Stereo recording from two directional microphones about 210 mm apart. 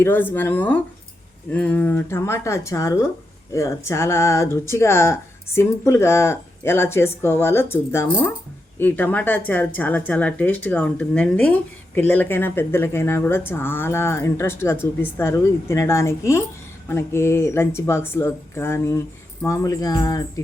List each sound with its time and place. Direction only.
0.0 s speech: 10° left (ahead or behind)